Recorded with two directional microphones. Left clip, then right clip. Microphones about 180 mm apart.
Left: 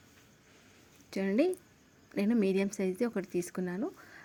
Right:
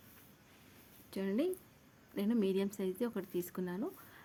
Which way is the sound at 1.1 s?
25° left (ahead or behind).